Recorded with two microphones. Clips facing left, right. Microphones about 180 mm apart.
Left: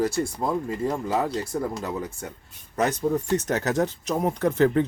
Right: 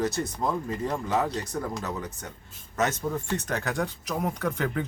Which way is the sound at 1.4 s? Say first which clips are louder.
Left 4 dB; 30° left (ahead or behind).